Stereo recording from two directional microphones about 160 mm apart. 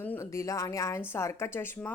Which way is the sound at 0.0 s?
15° left (ahead or behind).